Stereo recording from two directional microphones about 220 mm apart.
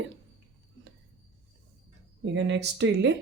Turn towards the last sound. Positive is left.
turn(degrees=-55)  # may be behind; listen again after turning